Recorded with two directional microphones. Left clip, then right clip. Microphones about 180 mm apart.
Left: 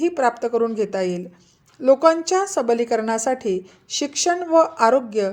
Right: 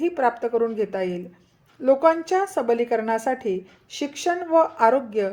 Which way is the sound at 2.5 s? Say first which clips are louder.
Left 2 dB; 40° left (ahead or behind).